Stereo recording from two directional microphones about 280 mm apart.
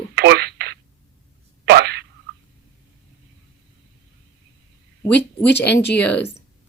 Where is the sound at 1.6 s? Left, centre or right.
Right.